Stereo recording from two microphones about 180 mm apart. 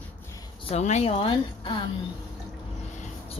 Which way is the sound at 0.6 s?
35° left (ahead or behind).